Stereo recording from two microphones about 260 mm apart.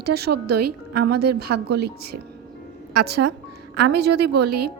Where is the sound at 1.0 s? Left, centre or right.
Right.